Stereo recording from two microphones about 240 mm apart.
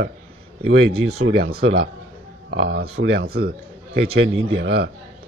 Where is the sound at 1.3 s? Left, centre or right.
Right.